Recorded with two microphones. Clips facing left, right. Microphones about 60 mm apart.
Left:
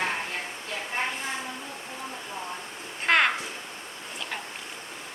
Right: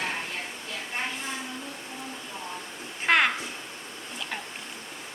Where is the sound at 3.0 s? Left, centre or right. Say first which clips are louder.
Even; centre.